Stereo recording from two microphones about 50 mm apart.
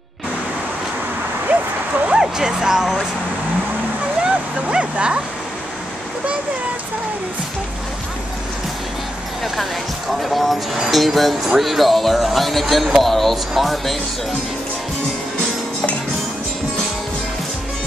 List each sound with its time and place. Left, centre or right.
2.0 s speech: centre
4.2 s vehicle: right
10.2 s speech: centre